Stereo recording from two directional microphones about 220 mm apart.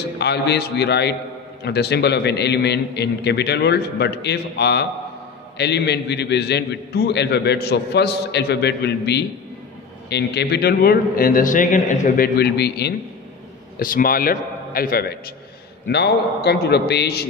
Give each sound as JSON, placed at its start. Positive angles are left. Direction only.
{"t": 0.2, "sound": "a man's voice", "side_deg": 50}